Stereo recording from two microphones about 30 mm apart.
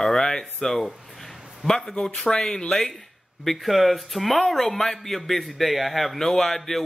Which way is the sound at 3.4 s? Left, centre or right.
Centre.